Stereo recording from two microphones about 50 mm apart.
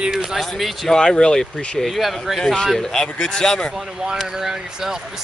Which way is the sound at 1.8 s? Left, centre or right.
Centre.